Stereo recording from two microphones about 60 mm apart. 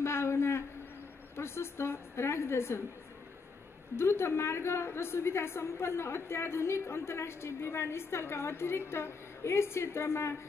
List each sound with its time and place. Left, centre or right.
0.0 s a sound: left
1.3 s a woman's voice: left
3.9 s a woman's voice: left